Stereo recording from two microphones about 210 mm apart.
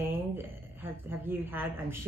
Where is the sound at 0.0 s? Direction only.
10° right (ahead or behind).